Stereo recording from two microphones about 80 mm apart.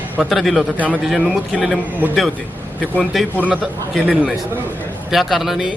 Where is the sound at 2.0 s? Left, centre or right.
Right.